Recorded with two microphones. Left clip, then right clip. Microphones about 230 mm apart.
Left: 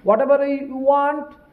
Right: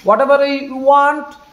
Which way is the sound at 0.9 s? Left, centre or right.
Right.